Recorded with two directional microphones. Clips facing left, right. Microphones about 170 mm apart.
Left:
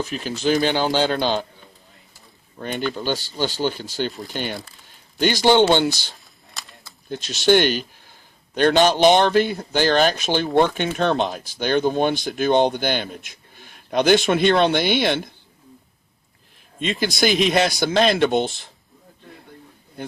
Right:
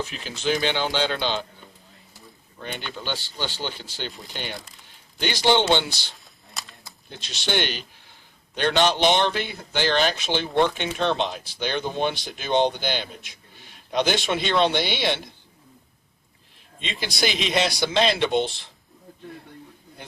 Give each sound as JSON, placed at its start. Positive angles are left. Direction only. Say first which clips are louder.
{"t": 0.1, "sound": "speech", "louder": "left 5 dB", "side_deg": 45}
{"t": 2.6, "sound": "speech", "louder": "left 9 dB", "side_deg": 45}
{"t": 7.1, "sound": "speech", "louder": "left 11 dB", "side_deg": 45}
{"t": 16.8, "sound": "speech", "louder": "left 6 dB", "side_deg": 50}